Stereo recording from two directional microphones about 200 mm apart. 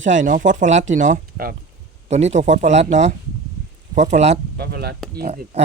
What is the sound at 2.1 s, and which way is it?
Speech, 35° right (ahead or behind).